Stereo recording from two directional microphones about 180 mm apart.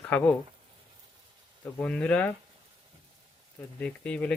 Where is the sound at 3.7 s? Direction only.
5° left (ahead or behind).